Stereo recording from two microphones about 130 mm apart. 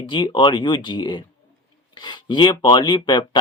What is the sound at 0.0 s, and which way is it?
Speech, 40° left (ahead or behind).